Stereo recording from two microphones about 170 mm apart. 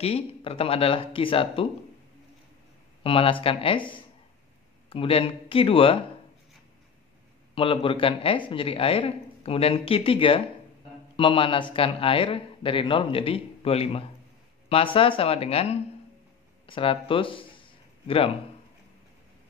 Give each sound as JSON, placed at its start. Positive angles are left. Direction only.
{"t": 0.0, "sound": "speech", "side_deg": 35}
{"t": 3.0, "sound": "speech", "side_deg": 30}
{"t": 7.5, "sound": "speech", "side_deg": 30}